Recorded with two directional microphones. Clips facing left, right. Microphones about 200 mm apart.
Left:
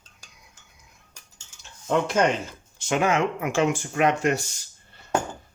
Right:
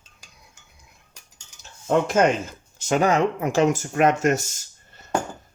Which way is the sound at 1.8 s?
45° right (ahead or behind).